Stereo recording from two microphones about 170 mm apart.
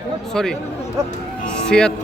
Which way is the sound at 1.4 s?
5° left (ahead or behind).